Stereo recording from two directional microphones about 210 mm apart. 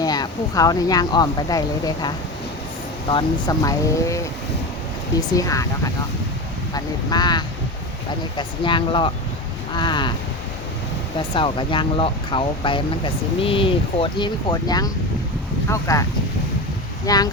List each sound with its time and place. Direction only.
0.0 s speech: 20° left (ahead or behind)
5.3 s speech: 15° left (ahead or behind)
11.2 s speech: 25° left (ahead or behind)
17.1 s speech: 15° left (ahead or behind)